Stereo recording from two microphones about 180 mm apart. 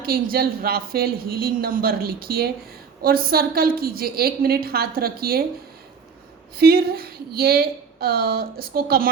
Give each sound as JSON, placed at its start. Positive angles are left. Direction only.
{"t": 0.0, "sound": "speech", "side_deg": -55}
{"t": 6.6, "sound": "speech", "side_deg": -60}